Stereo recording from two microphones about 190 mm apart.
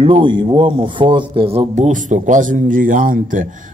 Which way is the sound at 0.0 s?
25° right (ahead or behind).